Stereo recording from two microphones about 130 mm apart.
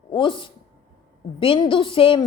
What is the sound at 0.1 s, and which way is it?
A woman's voice, 40° left (ahead or behind).